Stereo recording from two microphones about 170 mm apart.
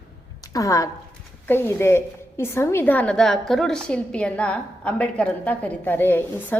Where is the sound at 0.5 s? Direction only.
20° left (ahead or behind).